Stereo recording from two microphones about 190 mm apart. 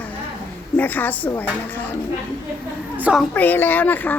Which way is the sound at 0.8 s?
10° left (ahead or behind).